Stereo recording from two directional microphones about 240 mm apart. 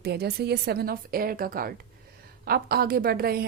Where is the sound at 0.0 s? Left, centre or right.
Right.